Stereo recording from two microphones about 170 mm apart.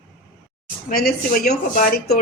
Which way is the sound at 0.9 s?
60° left (ahead or behind).